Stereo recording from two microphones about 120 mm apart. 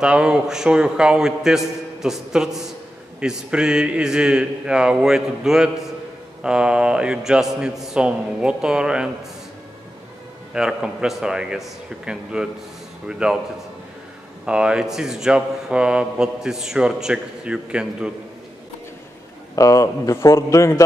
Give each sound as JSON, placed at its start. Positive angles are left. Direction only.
{"t": 0.0, "sound": "a man's voice", "side_deg": -5}
{"t": 10.5, "sound": "speech", "side_deg": -5}
{"t": 14.4, "sound": "speech", "side_deg": -10}
{"t": 19.5, "sound": "a man's voice", "side_deg": 25}